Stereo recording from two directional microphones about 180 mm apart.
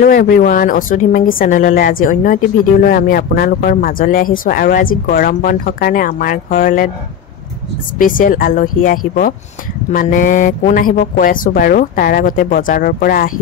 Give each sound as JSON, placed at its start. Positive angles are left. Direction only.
{"t": 0.0, "sound": "a woman's voice", "side_deg": 55}
{"t": 8.0, "sound": "a woman's voice", "side_deg": 50}